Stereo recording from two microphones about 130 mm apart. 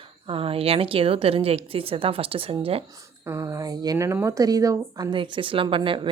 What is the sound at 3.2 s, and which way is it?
Speech, 20° right (ahead or behind).